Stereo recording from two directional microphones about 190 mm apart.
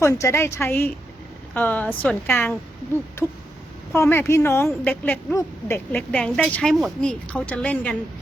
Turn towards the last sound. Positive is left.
turn(degrees=5)  # may be behind; listen again after turning